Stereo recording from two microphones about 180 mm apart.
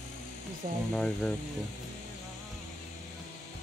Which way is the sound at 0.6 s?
50° right (ahead or behind).